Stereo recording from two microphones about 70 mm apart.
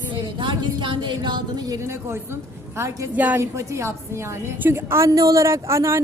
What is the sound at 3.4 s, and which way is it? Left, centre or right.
Speech, right.